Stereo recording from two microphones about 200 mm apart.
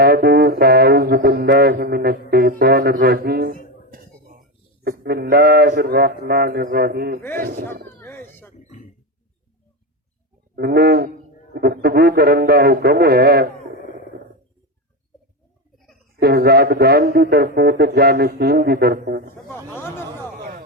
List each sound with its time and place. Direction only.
0.0 s music: 50° right (ahead or behind)
3.9 s speech: 45° right (ahead or behind)
7.3 s music: 50° right (ahead or behind)
7.9 s a sound: 10° left (ahead or behind)
10.5 s music: 55° right (ahead or behind)
16.2 s music: 50° right (ahead or behind)
19.5 s speech: 10° left (ahead or behind)
20.4 s a sound: 45° right (ahead or behind)